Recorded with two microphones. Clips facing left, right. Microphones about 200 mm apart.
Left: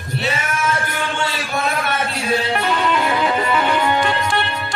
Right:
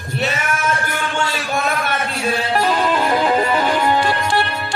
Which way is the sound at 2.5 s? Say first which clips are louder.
Right 2 dB; 35° right (ahead or behind).